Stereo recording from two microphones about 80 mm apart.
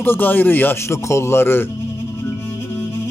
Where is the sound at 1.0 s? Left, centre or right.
Left.